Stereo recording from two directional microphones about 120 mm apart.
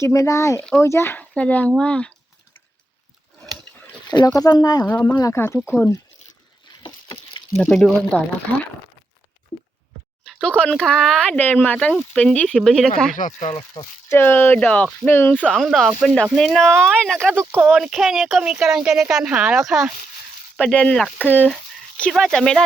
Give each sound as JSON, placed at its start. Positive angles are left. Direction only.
{"t": 0.0, "sound": "speech", "side_deg": 25}
{"t": 4.4, "sound": "speech", "side_deg": 35}
{"t": 4.9, "sound": "speech", "side_deg": 15}
{"t": 6.8, "sound": "a sound", "side_deg": 40}
{"t": 7.5, "sound": "speech", "side_deg": 5}
{"t": 10.2, "sound": "speech", "side_deg": 10}
{"t": 13.1, "sound": "speech", "side_deg": 90}
{"t": 14.1, "sound": "speech", "side_deg": 20}
{"t": 15.4, "sound": "a woman's voice", "side_deg": 0}
{"t": 17.6, "sound": "a woman's voice", "side_deg": -5}
{"t": 20.6, "sound": "a woman's voice", "side_deg": 10}